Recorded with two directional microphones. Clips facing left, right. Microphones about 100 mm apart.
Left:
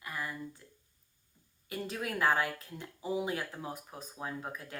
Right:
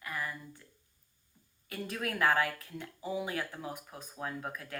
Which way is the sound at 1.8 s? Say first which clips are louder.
Right 1 dB; 20° left (ahead or behind).